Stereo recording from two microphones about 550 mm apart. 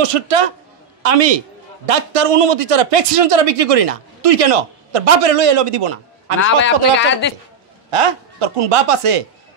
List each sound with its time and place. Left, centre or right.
0.0 s a man's voice: right
1.0 s a man's voice: right
1.9 s a man's voice: right
6.4 s speech: centre
7.9 s speech: right